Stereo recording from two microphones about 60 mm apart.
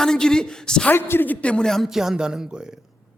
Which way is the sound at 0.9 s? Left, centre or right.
Left.